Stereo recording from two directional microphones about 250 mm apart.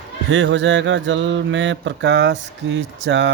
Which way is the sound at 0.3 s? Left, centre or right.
Right.